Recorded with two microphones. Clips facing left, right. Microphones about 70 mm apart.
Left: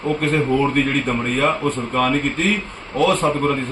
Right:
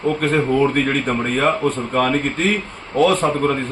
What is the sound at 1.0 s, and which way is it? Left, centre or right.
Speech, right.